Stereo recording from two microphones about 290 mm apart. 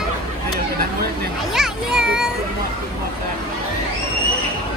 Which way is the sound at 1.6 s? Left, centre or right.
Centre.